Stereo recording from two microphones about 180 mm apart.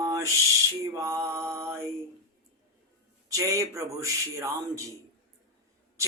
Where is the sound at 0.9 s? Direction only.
15° right (ahead or behind).